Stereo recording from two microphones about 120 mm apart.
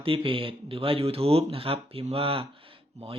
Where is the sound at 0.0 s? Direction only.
50° right (ahead or behind).